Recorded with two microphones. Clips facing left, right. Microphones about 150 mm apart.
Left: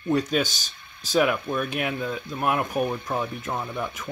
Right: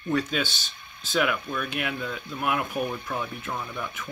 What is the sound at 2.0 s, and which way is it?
Speech, 30° left (ahead or behind).